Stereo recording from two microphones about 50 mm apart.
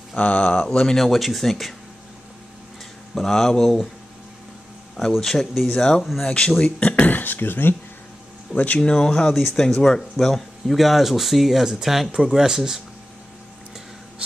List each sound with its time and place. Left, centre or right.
0.1 s speech: left
0.9 s speech: centre
3.2 s speech: centre
5.2 s speech: centre
6.6 s a sound: left
7.1 s speech: left
8.5 s speech: left
8.8 s speech: centre
9.3 s speech: centre